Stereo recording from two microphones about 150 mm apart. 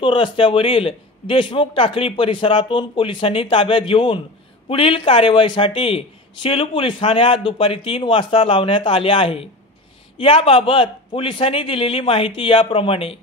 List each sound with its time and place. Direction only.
0.0 s speech: 35° left (ahead or behind)